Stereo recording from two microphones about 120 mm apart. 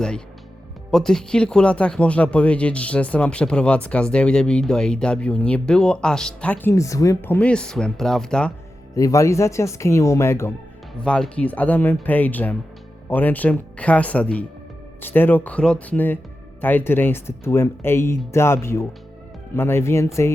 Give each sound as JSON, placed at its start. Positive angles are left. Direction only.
{"t": 0.9, "sound": "speech", "side_deg": 5}
{"t": 9.0, "sound": "speech", "side_deg": 25}
{"t": 11.0, "sound": "speech", "side_deg": 10}